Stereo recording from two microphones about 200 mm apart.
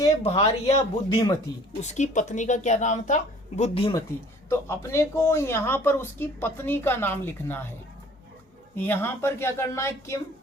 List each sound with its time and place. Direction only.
0.2 s a woman's voice: 30° left (ahead or behind)
4.4 s speech: 15° left (ahead or behind)
8.7 s speech: 10° left (ahead or behind)